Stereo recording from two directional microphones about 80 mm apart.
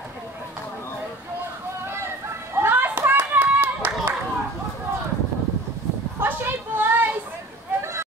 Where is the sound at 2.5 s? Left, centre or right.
Right.